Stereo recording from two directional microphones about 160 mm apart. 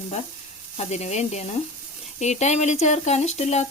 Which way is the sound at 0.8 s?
45° left (ahead or behind).